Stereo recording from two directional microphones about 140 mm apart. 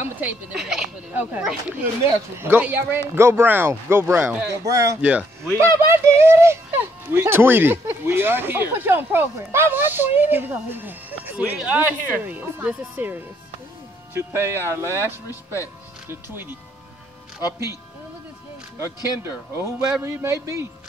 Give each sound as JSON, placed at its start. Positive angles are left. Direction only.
{"t": 0.0, "sound": "speech", "side_deg": -10}
{"t": 4.6, "sound": "speech", "side_deg": -25}
{"t": 5.0, "sound": "speech", "side_deg": -10}
{"t": 5.6, "sound": "speech", "side_deg": -20}
{"t": 17.4, "sound": "speech", "side_deg": 25}
{"t": 19.2, "sound": "speech", "side_deg": -20}